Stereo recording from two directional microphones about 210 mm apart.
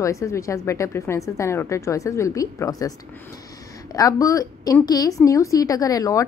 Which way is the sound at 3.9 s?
15° left (ahead or behind).